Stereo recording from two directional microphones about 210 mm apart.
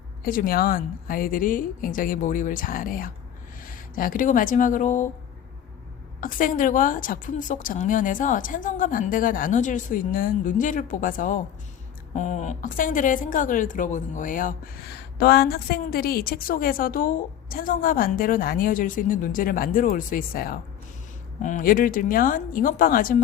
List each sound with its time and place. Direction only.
0.3 s a woman's voice: 45° left (ahead or behind)
6.1 s a woman's voice: 40° left (ahead or behind)